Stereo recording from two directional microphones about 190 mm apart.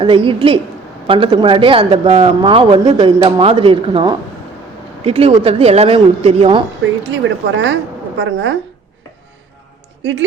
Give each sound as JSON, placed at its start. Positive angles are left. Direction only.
{"t": 0.0, "sound": "speech", "side_deg": -25}
{"t": 7.5, "sound": "a woman's voice", "side_deg": -75}
{"t": 10.0, "sound": "speech", "side_deg": -70}